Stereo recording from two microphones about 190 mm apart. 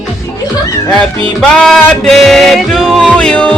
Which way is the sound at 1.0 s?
5° left (ahead or behind).